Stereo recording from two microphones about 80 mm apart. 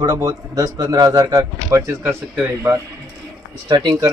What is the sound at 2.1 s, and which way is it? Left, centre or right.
Speech, right.